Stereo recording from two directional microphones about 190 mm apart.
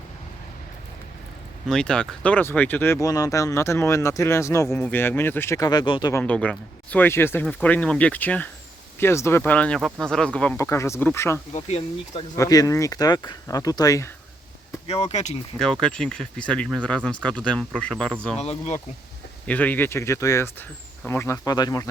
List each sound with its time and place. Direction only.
1.6 s speech: 5° left (ahead or behind); by 6.2 s 20° left (ahead or behind)
6.2 s speech: 5° left (ahead or behind)
11.5 s speech: 35° left (ahead or behind)
12.4 s speech: 20° left (ahead or behind)
14.8 s speech: 35° left (ahead or behind)
15.5 s speech: 5° left (ahead or behind)
18.3 s speech: 35° left (ahead or behind)
19.5 s speech: 10° left (ahead or behind)